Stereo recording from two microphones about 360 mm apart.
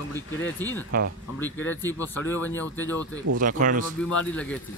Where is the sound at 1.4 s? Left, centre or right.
Centre.